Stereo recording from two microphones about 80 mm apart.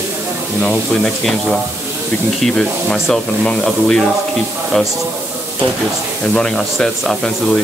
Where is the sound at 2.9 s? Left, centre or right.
Centre.